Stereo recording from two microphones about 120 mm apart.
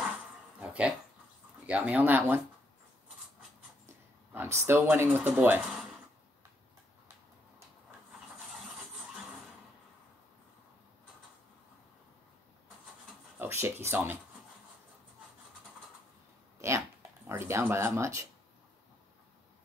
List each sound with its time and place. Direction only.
0.6 s dog: 10° right (ahead or behind)
1.7 s speech: 10° right (ahead or behind)
4.3 s speech: 20° right (ahead or behind)
13.4 s speech: 20° right (ahead or behind)
16.6 s a sound: 25° right (ahead or behind)
17.3 s speech: 20° right (ahead or behind)